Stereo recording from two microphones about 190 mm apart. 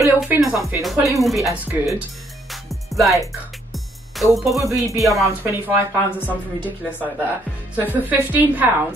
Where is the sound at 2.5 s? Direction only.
Centre (ahead or behind).